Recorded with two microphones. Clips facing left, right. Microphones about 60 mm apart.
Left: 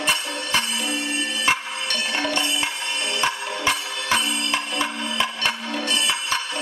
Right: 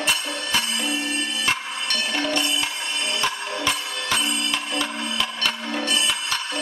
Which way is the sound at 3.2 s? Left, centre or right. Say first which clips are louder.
Left 3 dB; left.